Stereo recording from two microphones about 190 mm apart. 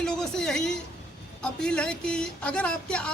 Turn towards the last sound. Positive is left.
turn(degrees=5)  # may be behind; listen again after turning